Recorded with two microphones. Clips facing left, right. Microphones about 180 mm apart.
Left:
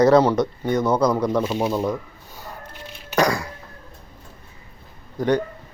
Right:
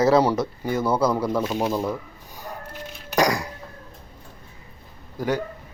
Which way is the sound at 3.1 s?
15° right (ahead or behind).